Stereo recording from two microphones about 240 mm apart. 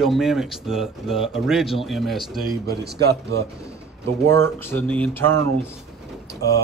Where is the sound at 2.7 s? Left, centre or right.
Right.